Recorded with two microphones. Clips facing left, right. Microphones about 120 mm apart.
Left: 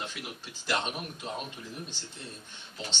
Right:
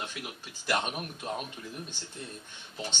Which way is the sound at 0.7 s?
5° right (ahead or behind).